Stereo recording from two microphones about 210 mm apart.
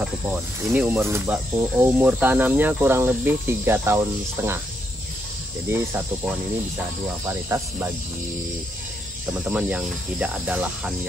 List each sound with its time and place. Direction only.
0.0 s speech: 5° right (ahead or behind)
5.7 s speech: 10° right (ahead or behind)
9.3 s cricket: 5° right (ahead or behind)